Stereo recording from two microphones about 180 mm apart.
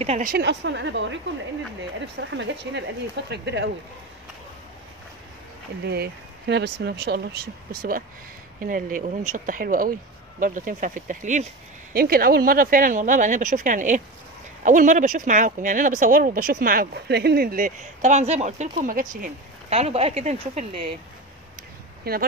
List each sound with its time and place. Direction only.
0.0 s speech: 35° right (ahead or behind)
0.3 s speech: 75° right (ahead or behind)
5.9 s speech: 65° right (ahead or behind)
8.5 s speech: 50° right (ahead or behind)
11.9 s speech: 55° right (ahead or behind)
19.7 s speech: 35° right (ahead or behind)
22.0 s speech: 60° right (ahead or behind)